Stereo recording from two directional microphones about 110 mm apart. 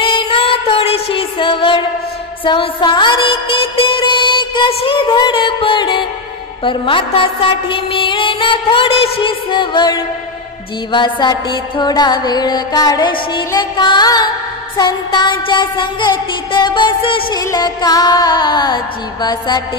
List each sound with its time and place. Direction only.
0.0 s music: 55° left (ahead or behind)
17.3 s music: 35° left (ahead or behind)